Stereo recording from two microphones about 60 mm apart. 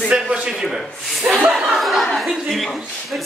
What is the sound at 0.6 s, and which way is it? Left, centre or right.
Speech, centre.